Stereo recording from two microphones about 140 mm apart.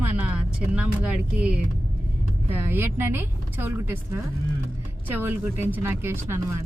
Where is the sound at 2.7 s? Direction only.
15° right (ahead or behind).